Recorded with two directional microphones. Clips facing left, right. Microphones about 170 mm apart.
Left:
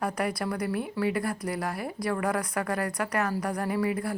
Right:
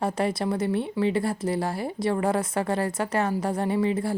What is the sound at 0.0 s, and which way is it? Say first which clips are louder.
Speech: right 4 dB; 25° right (ahead or behind).